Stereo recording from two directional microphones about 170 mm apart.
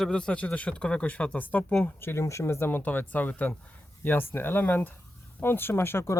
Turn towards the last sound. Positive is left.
turn(degrees=15)  # may be behind; listen again after turning